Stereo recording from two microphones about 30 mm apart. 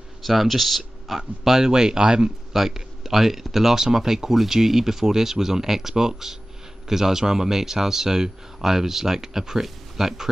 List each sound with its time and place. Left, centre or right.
0.2 s speech: centre; by 2.3 s right
2.5 s a man's voice: centre
3.7 s speech: centre